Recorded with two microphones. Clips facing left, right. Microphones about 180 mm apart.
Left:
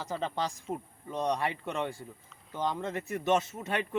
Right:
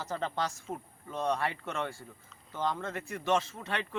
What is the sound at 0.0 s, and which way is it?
A man's voice, 10° left (ahead or behind).